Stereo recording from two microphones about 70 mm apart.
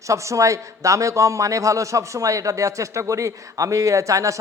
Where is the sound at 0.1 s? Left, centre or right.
Right.